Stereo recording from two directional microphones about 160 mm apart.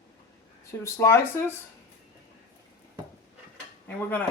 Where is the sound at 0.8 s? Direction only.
15° left (ahead or behind).